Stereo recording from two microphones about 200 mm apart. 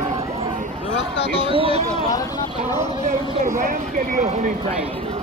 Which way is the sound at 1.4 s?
25° right (ahead or behind).